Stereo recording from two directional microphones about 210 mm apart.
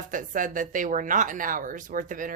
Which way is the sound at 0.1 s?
40° right (ahead or behind).